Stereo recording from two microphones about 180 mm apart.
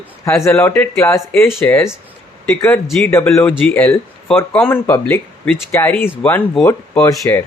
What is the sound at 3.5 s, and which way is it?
Speech, 5° left (ahead or behind).